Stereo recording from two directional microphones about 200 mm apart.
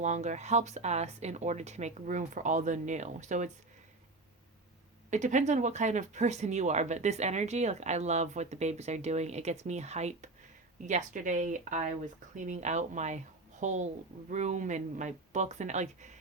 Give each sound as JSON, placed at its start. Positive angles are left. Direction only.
{"t": 0.0, "sound": "speech", "side_deg": -35}
{"t": 5.1, "sound": "speech", "side_deg": -35}